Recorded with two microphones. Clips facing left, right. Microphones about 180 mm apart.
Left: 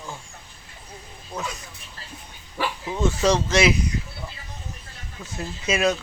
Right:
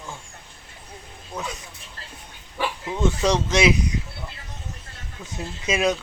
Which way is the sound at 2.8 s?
5° left (ahead or behind).